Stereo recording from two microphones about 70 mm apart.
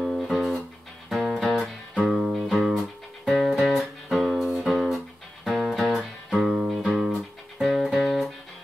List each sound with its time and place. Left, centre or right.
0.0 s music: centre